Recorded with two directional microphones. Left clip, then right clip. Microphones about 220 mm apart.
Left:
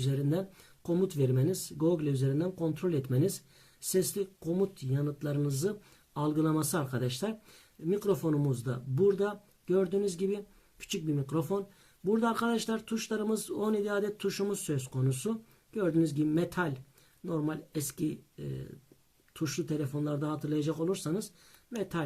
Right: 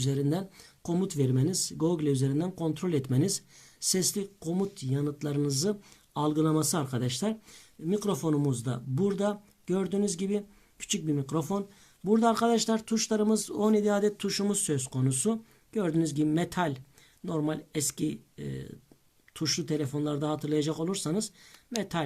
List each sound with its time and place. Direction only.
0.0 s speech: 30° right (ahead or behind)
19.3 s speech: 30° right (ahead or behind)